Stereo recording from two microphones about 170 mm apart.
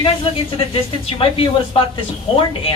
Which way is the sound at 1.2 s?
35° left (ahead or behind).